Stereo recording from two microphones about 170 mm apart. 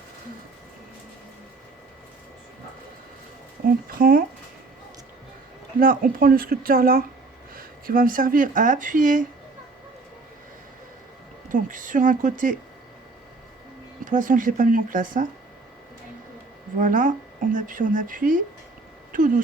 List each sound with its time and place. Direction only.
3.8 s speech: 55° right (ahead or behind)
5.8 s speech: 55° right (ahead or behind)
11.4 s speech: 50° right (ahead or behind)
14.0 s speech: 50° right (ahead or behind)
16.8 s speech: 50° right (ahead or behind)